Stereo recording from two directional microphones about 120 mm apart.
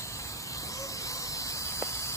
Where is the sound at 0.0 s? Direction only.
25° left (ahead or behind).